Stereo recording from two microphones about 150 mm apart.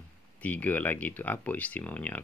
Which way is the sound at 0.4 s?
10° left (ahead or behind).